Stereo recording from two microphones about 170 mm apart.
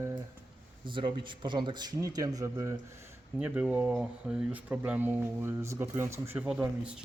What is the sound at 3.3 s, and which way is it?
Speech, 10° right (ahead or behind).